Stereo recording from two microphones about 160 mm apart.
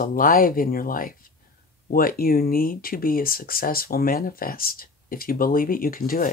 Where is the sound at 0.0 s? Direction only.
60° left (ahead or behind).